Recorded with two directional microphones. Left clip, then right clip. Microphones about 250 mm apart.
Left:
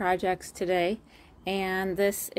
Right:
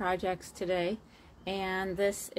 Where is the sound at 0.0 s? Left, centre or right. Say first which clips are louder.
Left 5 dB; left.